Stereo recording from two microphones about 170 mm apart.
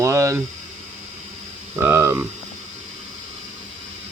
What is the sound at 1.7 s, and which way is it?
Speech, 15° right (ahead or behind).